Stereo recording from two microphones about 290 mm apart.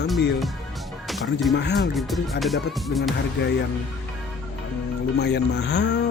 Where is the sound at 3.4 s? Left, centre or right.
Left.